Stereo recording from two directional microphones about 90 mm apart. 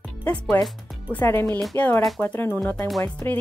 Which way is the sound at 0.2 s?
20° left (ahead or behind).